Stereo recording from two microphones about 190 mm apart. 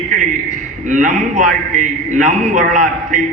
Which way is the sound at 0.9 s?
40° right (ahead or behind).